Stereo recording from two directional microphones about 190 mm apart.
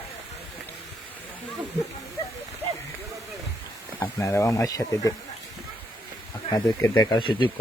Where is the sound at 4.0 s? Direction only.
15° left (ahead or behind).